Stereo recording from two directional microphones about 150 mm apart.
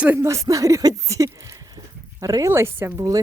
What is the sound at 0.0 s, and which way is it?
Speech, 15° right (ahead or behind).